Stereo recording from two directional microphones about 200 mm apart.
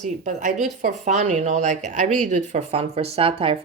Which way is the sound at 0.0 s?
40° right (ahead or behind).